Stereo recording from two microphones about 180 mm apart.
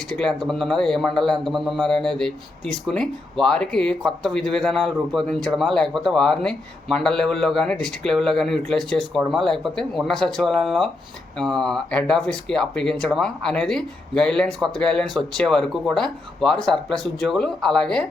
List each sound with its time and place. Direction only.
0.1 s speech: 5° left (ahead or behind)